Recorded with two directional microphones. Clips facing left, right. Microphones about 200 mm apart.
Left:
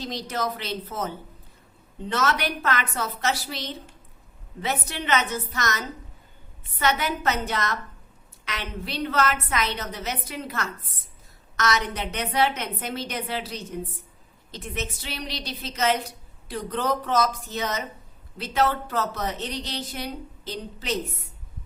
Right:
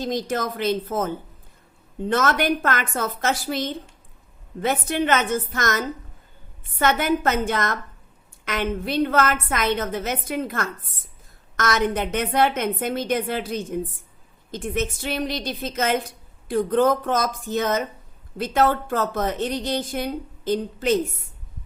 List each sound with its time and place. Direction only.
0.0 s a woman's voice: 50° right (ahead or behind)